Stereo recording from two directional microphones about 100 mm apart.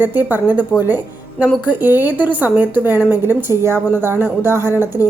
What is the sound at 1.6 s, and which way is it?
Speech, 20° right (ahead or behind).